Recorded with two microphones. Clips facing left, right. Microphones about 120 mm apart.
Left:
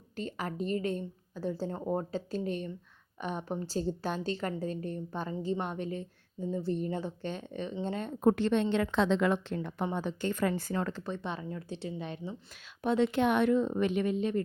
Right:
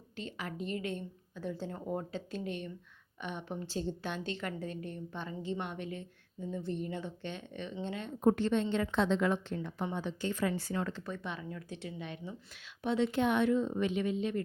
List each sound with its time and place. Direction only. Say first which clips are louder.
0.2 s a woman's voice: left 5 dB; 40° left (ahead or behind)
8.2 s a woman's voice: left 2 dB; 85° left; by 9.8 s 65° left (ahead or behind)
9.8 s speech: left 4 dB; 45° left (ahead or behind)
11.0 s a woman's voice: left 4 dB; 30° left (ahead or behind)
12.8 s speech: left 3 dB; 45° left (ahead or behind)
13.1 s speech: left 3 dB; 65° left (ahead or behind); by 14.4 s 40° left (ahead or behind)